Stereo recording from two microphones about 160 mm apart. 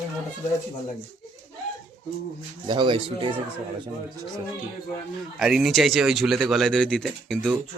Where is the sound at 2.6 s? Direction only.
30° right (ahead or behind).